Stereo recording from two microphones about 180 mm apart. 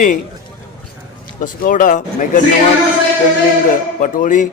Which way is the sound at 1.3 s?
50° left (ahead or behind).